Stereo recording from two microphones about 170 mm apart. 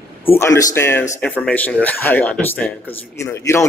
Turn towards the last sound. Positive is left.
turn(degrees=15)  # may be behind; listen again after turning